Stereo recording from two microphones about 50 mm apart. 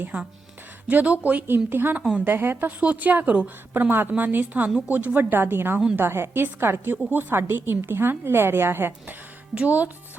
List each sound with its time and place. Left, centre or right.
0.1 s a woman's voice: right
2.8 s a woman's voice: right
3.8 s a woman's voice: right
9.6 s speech: right